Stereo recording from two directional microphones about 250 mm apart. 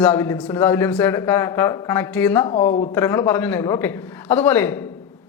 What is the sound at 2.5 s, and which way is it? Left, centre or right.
Speech, left.